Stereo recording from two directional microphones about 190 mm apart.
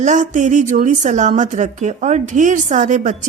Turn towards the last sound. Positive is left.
turn(degrees=-40)  # may be behind; listen again after turning